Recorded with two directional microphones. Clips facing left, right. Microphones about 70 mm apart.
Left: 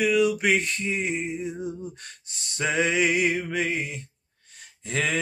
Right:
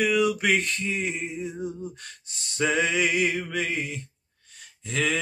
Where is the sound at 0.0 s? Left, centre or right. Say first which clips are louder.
Left 1 dB; centre.